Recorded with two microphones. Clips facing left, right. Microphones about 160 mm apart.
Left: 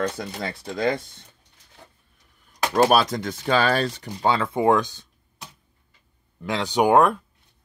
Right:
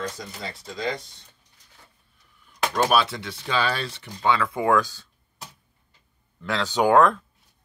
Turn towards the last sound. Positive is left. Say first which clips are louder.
# left 1 dB
turn(degrees=15)  # may be behind; listen again after turning